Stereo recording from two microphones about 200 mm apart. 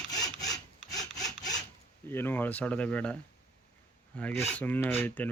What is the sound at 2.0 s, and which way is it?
Speech, 10° left (ahead or behind).